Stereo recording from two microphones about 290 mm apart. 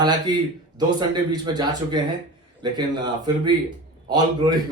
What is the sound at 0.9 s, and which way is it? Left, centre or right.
Speech, centre.